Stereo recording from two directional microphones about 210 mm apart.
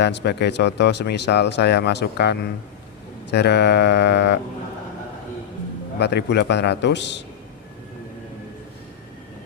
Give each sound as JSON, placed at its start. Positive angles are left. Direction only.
{"t": 0.0, "sound": "speech", "side_deg": 55}
{"t": 6.0, "sound": "a man's voice", "side_deg": 55}